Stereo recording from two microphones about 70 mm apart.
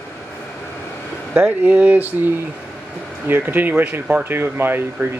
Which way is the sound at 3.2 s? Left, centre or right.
Right.